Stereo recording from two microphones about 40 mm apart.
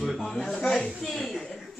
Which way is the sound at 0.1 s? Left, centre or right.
Centre.